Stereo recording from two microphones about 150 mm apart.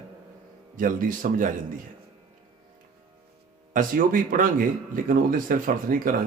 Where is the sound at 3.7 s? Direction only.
65° right (ahead or behind).